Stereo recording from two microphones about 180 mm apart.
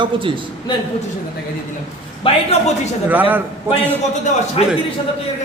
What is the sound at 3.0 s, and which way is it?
Speech, 10° right (ahead or behind).